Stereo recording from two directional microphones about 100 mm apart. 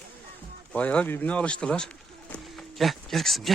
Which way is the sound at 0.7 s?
15° left (ahead or behind).